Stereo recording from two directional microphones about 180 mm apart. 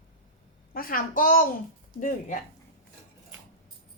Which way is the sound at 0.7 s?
50° left (ahead or behind).